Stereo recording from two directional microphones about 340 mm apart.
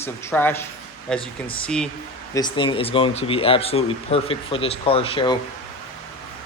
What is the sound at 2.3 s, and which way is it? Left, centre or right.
Speech, centre.